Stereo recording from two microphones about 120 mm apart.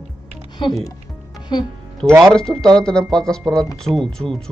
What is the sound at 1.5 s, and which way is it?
Speech, 35° left (ahead or behind).